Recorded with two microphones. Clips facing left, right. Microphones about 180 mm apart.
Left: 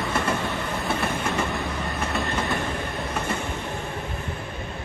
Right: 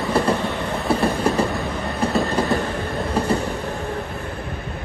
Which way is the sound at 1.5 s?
Centre (ahead or behind).